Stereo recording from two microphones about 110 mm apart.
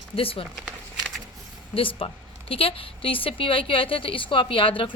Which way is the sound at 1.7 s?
55° left (ahead or behind).